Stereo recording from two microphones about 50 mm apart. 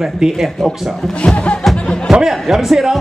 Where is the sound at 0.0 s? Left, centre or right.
Centre.